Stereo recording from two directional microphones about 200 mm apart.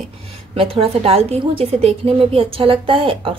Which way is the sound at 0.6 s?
30° right (ahead or behind).